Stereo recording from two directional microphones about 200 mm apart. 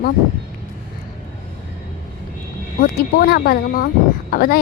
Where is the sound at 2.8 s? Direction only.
50° left (ahead or behind).